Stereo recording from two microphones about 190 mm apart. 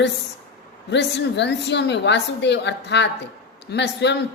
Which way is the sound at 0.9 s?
65° left (ahead or behind).